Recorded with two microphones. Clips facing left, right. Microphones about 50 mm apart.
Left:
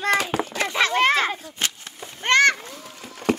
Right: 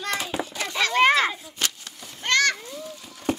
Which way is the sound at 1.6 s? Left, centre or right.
Left.